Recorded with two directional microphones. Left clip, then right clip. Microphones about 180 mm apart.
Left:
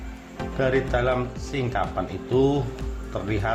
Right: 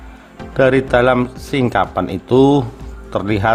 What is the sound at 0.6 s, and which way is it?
A man's voice, 55° right (ahead or behind).